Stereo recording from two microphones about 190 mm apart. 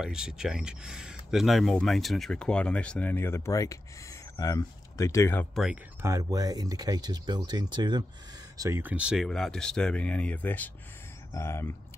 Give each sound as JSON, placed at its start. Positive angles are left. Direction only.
{"t": 0.0, "sound": "speech", "side_deg": -5}
{"t": 6.0, "sound": "speech", "side_deg": -20}